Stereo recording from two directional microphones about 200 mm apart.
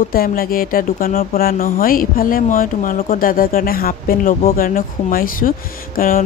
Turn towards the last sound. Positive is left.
turn(degrees=45)  # may be behind; listen again after turning